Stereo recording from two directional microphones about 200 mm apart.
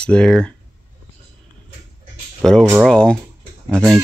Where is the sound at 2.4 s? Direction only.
Centre (ahead or behind).